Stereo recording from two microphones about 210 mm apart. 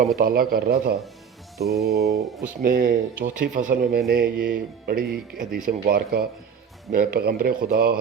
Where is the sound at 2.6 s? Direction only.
45° right (ahead or behind).